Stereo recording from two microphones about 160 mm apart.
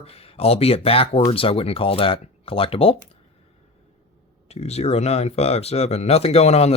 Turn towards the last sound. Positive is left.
turn(degrees=40)  # may be behind; listen again after turning